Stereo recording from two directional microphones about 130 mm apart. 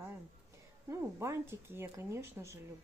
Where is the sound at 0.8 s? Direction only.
20° right (ahead or behind).